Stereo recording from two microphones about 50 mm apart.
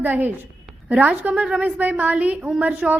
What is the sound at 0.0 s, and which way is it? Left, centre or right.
A woman's voice, right.